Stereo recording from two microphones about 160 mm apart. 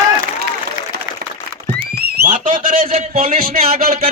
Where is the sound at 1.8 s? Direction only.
75° right (ahead or behind).